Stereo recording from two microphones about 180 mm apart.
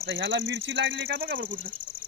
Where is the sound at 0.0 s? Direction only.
75° right (ahead or behind).